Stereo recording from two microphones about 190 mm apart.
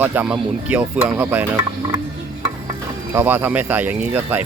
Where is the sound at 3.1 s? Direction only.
10° right (ahead or behind).